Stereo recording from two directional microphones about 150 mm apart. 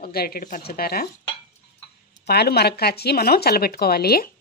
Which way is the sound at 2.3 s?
90° left.